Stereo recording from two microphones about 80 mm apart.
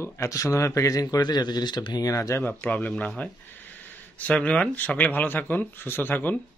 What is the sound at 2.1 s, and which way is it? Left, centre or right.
Speech, left.